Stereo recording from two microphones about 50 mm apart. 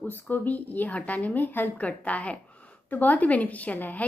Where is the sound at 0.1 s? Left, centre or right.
Left.